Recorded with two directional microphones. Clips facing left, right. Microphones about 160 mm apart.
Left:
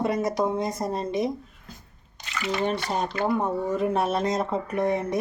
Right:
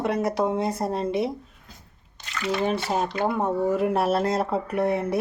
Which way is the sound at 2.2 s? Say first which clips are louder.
Right 1 dB; 10° left (ahead or behind).